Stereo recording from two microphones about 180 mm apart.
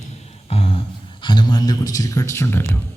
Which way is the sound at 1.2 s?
25° left (ahead or behind).